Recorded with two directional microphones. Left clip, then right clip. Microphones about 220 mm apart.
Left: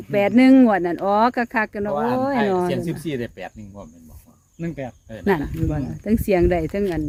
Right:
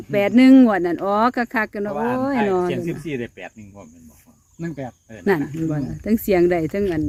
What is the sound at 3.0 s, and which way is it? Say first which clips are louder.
Cricket: left 1 dB; 65° left (ahead or behind).